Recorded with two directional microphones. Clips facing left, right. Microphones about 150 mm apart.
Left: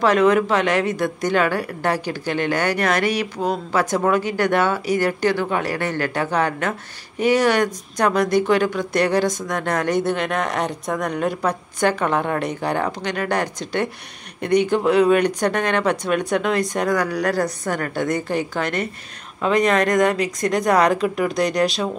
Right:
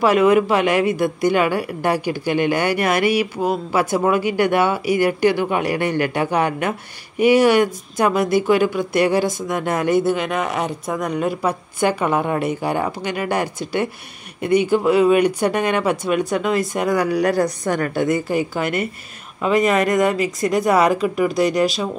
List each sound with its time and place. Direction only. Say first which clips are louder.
0.0 s speech: right 2 dB; 10° right (ahead or behind)
17.4 s a woman's voice: right 3 dB; 25° right (ahead or behind)
17.9 s speech: right 2 dB; 5° right (ahead or behind)